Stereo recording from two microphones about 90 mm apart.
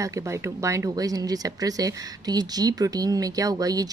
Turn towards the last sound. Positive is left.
turn(degrees=-45)  # may be behind; listen again after turning